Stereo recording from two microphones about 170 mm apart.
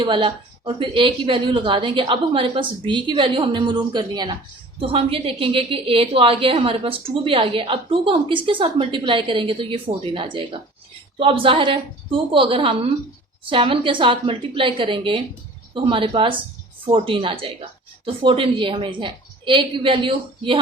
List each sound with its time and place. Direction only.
0.0 s a woman's voice: 30° right (ahead or behind)